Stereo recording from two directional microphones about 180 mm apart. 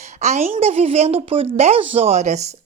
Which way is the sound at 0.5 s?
35° right (ahead or behind).